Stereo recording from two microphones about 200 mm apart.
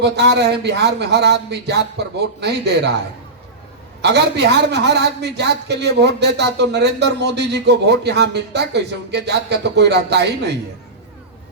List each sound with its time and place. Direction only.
0.0 s a man's voice: 55° right (ahead or behind)
4.0 s a man's voice: 55° right (ahead or behind)